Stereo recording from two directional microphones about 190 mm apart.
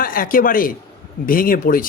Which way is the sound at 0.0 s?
50° left (ahead or behind).